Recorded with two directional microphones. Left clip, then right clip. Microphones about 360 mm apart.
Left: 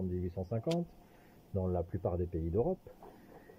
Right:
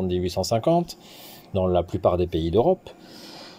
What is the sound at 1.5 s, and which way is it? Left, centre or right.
Speech, right.